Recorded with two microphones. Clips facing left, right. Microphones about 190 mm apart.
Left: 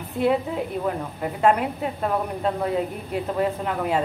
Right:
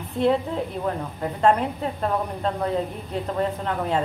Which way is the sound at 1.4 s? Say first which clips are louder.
Even; 10° left (ahead or behind).